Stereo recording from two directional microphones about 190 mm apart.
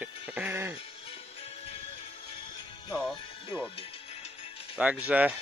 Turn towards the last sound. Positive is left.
turn(degrees=-5)  # may be behind; listen again after turning